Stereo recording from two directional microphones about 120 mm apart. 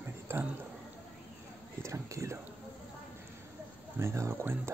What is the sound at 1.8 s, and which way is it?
Speech, 25° right (ahead or behind).